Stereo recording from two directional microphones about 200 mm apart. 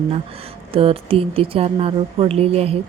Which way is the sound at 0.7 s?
30° right (ahead or behind).